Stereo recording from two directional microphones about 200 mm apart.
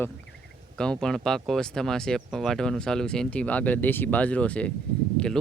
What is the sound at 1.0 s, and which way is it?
Speech, centre (ahead or behind).